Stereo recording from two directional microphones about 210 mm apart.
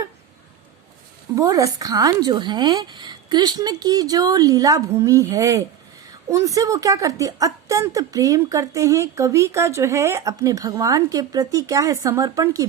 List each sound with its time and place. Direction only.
1.4 s a woman's voice: 15° right (ahead or behind)